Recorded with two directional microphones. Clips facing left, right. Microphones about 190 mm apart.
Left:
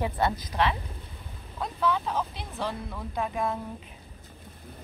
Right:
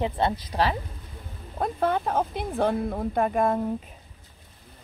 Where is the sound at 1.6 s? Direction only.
50° right (ahead or behind).